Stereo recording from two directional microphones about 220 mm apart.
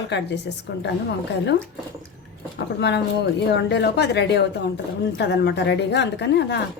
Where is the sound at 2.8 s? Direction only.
50° left (ahead or behind).